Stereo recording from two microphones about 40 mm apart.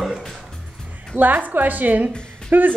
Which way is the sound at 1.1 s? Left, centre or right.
Right.